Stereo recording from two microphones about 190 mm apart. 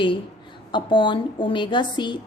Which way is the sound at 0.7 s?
25° left (ahead or behind).